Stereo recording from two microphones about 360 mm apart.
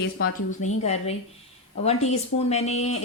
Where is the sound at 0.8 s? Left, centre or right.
Centre.